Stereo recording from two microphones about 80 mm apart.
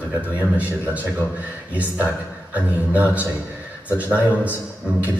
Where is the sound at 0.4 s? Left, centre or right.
Centre.